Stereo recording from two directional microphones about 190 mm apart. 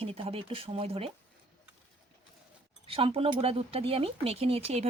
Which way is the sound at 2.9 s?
30° right (ahead or behind).